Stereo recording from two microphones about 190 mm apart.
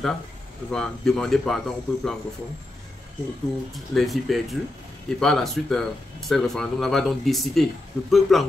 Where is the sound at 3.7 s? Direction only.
Centre (ahead or behind).